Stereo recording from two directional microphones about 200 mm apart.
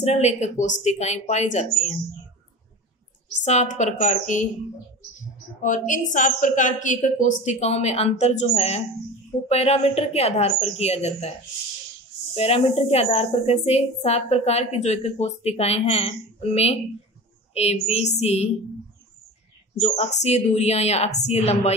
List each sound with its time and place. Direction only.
0.0 s a woman's voice: 35° left (ahead or behind)
3.4 s a woman's voice: 35° left (ahead or behind)
5.6 s a woman's voice: 40° left (ahead or behind)
12.4 s a woman's voice: 30° left (ahead or behind)
19.8 s a woman's voice: 35° left (ahead or behind)